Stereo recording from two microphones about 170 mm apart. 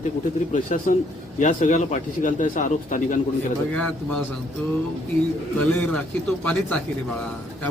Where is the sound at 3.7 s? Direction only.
5° left (ahead or behind).